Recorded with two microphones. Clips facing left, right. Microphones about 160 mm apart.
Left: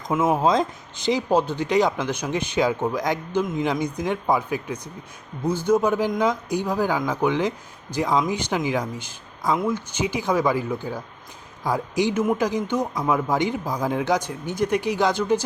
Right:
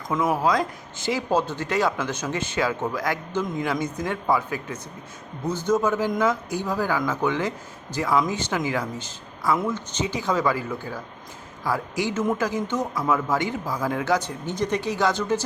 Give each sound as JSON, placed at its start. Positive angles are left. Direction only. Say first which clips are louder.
{"t": 0.1, "sound": "speech", "louder": "left 2 dB", "side_deg": 20}